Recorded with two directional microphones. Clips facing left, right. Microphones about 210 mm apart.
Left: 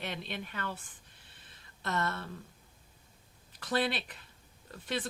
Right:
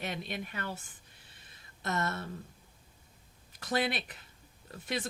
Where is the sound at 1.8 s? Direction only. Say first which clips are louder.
Even; 20° right (ahead or behind).